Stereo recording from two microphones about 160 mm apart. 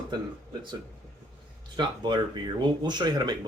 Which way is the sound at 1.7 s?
30° right (ahead or behind).